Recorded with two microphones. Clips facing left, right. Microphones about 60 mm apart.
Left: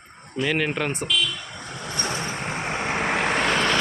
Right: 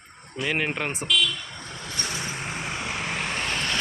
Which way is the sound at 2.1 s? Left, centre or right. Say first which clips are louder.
Left 3 dB; centre.